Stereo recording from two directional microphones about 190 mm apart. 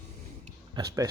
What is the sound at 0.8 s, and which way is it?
Speech, 20° right (ahead or behind).